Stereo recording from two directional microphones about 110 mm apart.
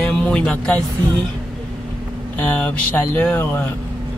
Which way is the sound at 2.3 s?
20° left (ahead or behind).